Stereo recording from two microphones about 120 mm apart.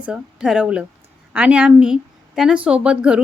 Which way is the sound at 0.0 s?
5° right (ahead or behind).